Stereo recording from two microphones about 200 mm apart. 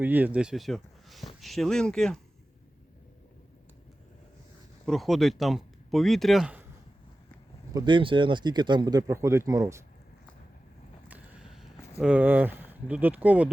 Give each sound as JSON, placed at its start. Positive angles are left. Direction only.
{"t": 0.0, "sound": "speech", "side_deg": -10}
{"t": 4.9, "sound": "speech", "side_deg": 0}
{"t": 7.7, "sound": "speech", "side_deg": -20}
{"t": 11.1, "sound": "a sound", "side_deg": -5}